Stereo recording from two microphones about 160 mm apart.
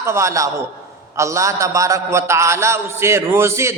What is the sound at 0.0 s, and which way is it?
A man's voice, 20° right (ahead or behind).